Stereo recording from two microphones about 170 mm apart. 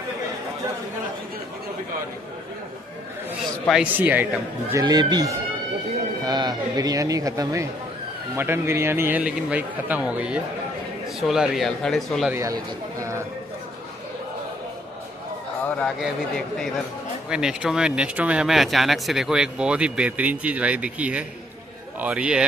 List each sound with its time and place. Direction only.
3.6 s a man's voice: 5° right (ahead or behind)
4.7 s a man's voice: 25° right (ahead or behind); by 12.3 s centre (ahead or behind)
15.6 s a man's voice: 5° left (ahead or behind)